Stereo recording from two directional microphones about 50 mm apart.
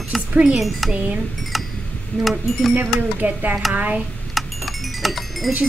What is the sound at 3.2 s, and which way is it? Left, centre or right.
Speech, right.